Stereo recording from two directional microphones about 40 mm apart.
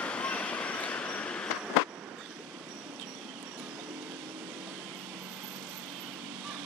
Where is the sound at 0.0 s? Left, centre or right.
Left.